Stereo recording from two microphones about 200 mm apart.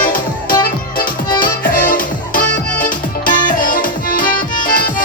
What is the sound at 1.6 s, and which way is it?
Music, 45° left (ahead or behind).